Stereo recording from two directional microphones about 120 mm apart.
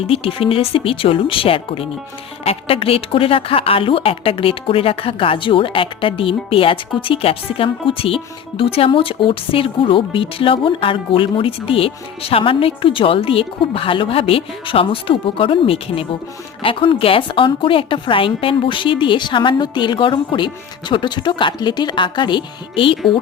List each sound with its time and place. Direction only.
0.1 s speech: 50° left (ahead or behind)